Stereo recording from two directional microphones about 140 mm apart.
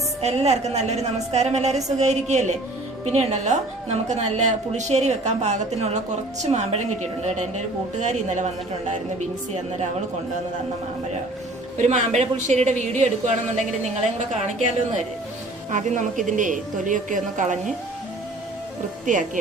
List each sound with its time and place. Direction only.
0.2 s a woman's voice: 50° right (ahead or behind)
11.8 s a woman's voice: 60° right (ahead or behind)
15.7 s a woman's voice: 65° right (ahead or behind)